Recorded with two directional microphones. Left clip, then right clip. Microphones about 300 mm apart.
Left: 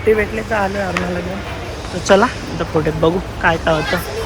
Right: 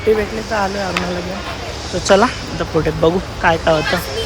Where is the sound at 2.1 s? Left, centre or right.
Centre.